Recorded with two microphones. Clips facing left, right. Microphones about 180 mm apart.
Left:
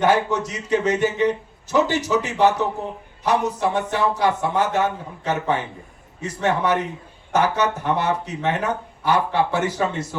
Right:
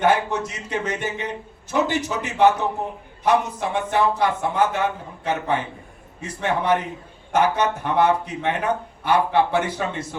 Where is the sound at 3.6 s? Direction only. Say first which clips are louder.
Even; 55° right (ahead or behind).